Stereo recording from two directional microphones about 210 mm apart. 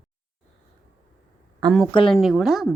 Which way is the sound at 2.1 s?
Centre (ahead or behind).